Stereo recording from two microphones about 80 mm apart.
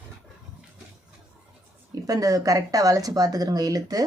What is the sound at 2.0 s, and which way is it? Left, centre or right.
Speech, right.